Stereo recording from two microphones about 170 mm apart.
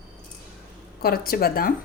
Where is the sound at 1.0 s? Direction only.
60° left (ahead or behind).